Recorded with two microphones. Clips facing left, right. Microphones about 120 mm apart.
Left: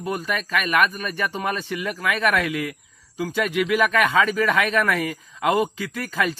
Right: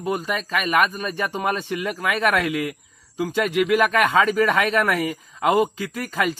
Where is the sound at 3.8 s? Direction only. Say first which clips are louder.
Even; 40° right (ahead or behind).